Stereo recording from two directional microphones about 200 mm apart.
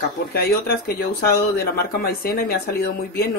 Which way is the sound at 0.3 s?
50° left (ahead or behind).